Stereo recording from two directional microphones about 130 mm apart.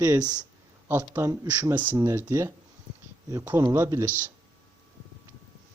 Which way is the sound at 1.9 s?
25° right (ahead or behind).